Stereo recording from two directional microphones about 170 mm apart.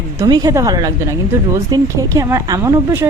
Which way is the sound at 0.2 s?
20° right (ahead or behind).